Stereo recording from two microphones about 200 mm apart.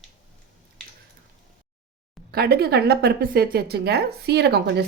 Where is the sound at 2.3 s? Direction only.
50° right (ahead or behind).